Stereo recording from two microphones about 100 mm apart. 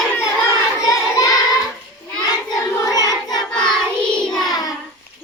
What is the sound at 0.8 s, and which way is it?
Child singing, 35° left (ahead or behind).